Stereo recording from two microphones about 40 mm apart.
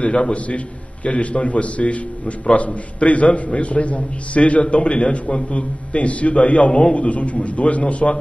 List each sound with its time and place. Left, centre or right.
0.0 s a man's voice: left